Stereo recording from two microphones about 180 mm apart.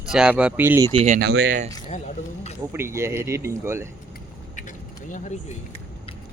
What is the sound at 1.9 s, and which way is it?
Speech, 40° left (ahead or behind).